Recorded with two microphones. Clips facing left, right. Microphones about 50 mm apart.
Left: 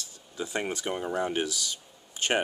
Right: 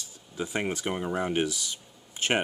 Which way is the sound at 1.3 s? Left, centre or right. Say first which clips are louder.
Right 2 dB; centre.